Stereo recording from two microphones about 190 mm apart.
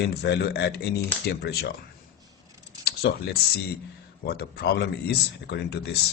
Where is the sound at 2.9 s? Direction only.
55° left (ahead or behind).